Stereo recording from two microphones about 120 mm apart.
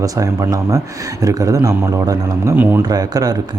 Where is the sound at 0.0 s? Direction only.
30° right (ahead or behind).